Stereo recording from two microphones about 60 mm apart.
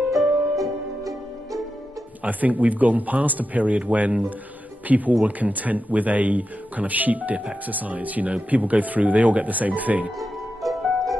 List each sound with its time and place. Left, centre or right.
0.6 s music: right
2.2 s speech: right
10.6 s music: centre